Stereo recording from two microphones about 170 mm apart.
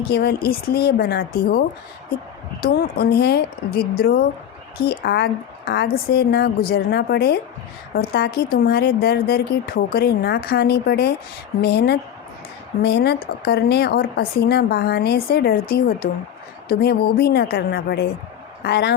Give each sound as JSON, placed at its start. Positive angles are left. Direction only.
{"t": 0.1, "sound": "speech", "side_deg": 70}